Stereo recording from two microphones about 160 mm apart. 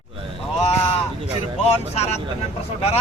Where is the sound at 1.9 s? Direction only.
40° left (ahead or behind).